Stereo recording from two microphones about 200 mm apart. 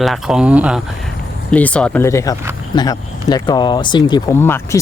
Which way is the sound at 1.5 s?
5° left (ahead or behind).